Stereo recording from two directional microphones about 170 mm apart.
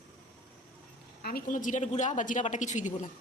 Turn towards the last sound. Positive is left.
turn(degrees=45)  # may be behind; listen again after turning